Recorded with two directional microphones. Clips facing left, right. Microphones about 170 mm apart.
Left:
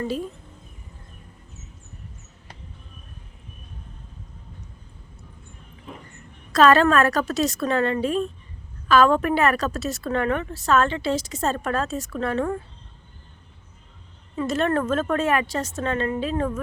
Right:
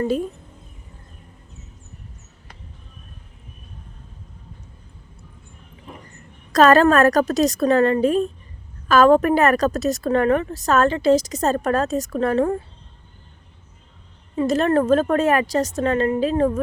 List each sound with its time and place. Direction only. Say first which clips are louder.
6.5 s a woman's voice: right 3 dB; 40° right (ahead or behind)
14.3 s a woman's voice: right 5 dB; 35° right (ahead or behind)